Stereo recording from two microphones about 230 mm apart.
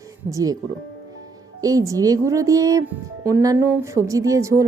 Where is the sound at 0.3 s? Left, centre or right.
Centre.